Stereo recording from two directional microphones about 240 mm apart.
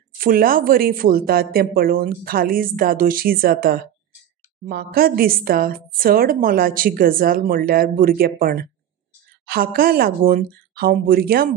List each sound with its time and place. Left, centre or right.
0.2 s a woman's voice: right